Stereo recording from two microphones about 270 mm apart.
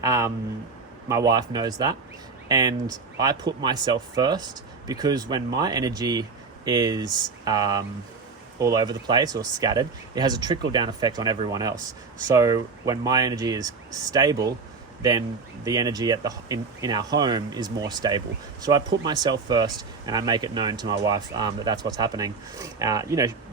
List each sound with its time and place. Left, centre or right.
0.0 s speech: centre
15.6 s speech: centre